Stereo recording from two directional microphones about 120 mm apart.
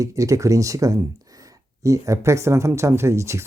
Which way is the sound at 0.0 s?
25° right (ahead or behind).